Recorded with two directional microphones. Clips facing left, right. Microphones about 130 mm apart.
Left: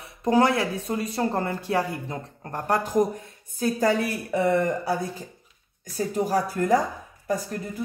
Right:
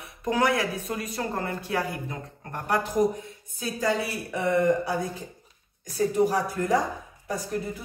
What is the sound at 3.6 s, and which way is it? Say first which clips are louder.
Speech: left 4 dB; 50° left (ahead or behind).